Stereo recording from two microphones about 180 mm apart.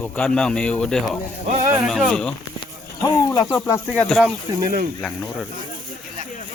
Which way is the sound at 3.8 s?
5° left (ahead or behind).